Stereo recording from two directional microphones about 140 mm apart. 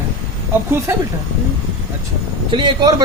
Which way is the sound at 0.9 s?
20° right (ahead or behind).